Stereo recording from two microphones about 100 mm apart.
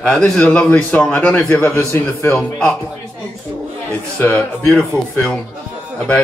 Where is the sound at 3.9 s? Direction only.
10° left (ahead or behind).